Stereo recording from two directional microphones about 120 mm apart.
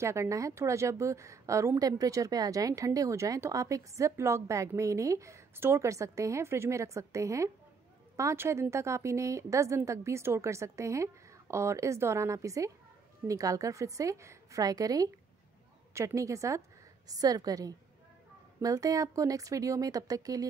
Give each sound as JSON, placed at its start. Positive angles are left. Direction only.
{"t": 0.0, "sound": "a woman's voice", "side_deg": -25}